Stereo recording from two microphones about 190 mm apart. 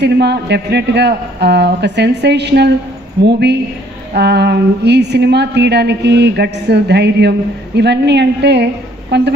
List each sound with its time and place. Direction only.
0.0 s a woman's voice: 60° right (ahead or behind)